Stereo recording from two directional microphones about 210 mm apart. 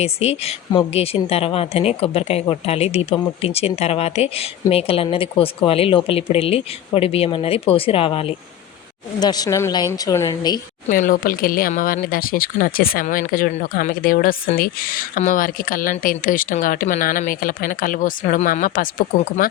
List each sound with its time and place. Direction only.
0.0 s a woman's voice: 30° left (ahead or behind)
10.8 s speech: 40° left (ahead or behind)